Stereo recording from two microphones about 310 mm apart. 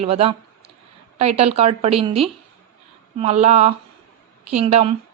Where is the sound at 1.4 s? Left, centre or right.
Centre.